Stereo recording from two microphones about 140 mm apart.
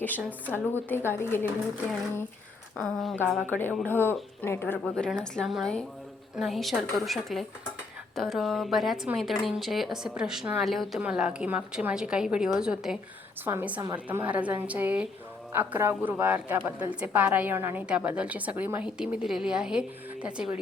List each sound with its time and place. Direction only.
0.3 s speech: 15° left (ahead or behind)
2.7 s a woman's voice: centre (ahead or behind)
3.8 s a woman's voice: 15° left (ahead or behind); by 20.6 s 10° right (ahead or behind)